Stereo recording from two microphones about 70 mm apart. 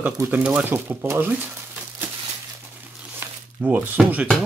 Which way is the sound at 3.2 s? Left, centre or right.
Right.